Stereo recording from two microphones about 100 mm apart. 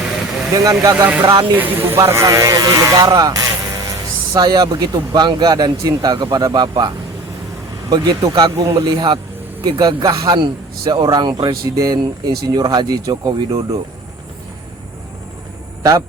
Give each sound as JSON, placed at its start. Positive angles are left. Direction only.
{"t": 0.5, "sound": "speech", "side_deg": -35}
{"t": 1.5, "sound": "speech", "side_deg": -20}
{"t": 15.8, "sound": "a man's voice", "side_deg": -40}